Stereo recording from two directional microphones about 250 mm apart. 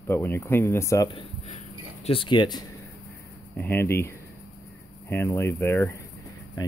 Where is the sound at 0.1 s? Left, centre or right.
Centre.